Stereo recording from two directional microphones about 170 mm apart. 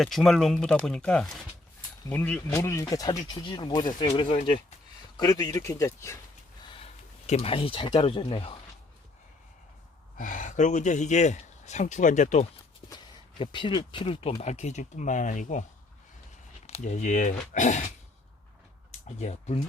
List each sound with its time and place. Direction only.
0.0 s speech: centre (ahead or behind); by 4.4 s 35° left (ahead or behind)
5.1 s speech: 20° left (ahead or behind)
6.7 s speech: 35° left (ahead or behind)
10.2 s speech: 50° left (ahead or behind)
12.9 s speech: 25° left (ahead or behind); by 15.6 s 45° left (ahead or behind)
16.6 s speech: 40° left (ahead or behind)
18.9 s speech: 40° left (ahead or behind)